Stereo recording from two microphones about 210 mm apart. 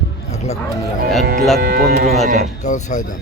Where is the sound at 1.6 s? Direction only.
45° right (ahead or behind).